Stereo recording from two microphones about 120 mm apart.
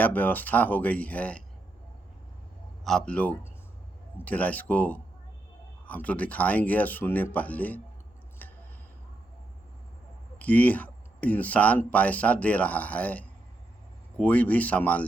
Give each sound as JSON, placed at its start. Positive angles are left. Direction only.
{"t": 0.0, "sound": "speech", "side_deg": 15}
{"t": 2.8, "sound": "speech", "side_deg": 5}
{"t": 8.4, "sound": "a sound", "side_deg": 15}
{"t": 10.3, "sound": "speech", "side_deg": 10}